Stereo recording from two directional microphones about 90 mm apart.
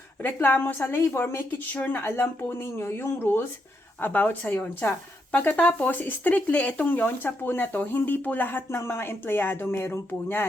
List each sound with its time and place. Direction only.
0.2 s a woman's voice: 20° left (ahead or behind)